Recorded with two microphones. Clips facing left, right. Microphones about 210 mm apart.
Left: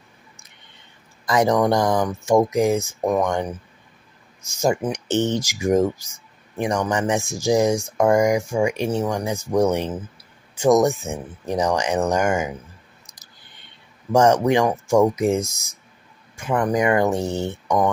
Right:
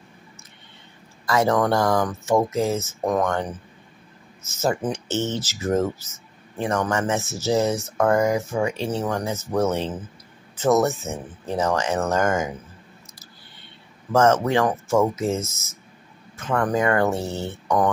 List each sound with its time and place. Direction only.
1.2 s speech: 15° left (ahead or behind)
13.0 s clicking: 15° left (ahead or behind)
14.1 s speech: 15° left (ahead or behind)